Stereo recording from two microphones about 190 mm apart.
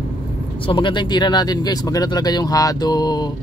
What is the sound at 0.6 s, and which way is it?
Speech, 25° left (ahead or behind).